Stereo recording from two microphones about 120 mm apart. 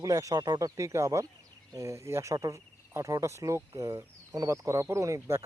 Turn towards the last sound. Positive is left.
turn(degrees=-25)  # may be behind; listen again after turning